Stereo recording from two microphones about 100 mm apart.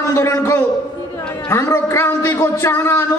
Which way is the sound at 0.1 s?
30° left (ahead or behind).